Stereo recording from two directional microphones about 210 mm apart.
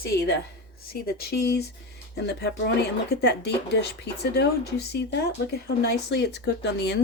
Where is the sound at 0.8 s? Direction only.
45° left (ahead or behind).